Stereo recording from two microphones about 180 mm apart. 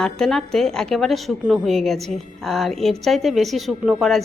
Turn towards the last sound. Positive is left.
turn(degrees=0)  # may be behind; listen again after turning